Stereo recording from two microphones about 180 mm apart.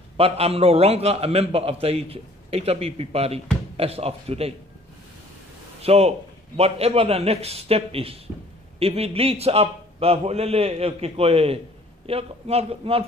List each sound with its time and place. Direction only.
0.2 s a man's voice: 35° right (ahead or behind)
5.8 s a man's voice: 35° right (ahead or behind)